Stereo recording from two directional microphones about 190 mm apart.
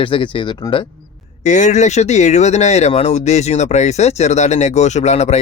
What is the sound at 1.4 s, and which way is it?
Speech, 40° left (ahead or behind).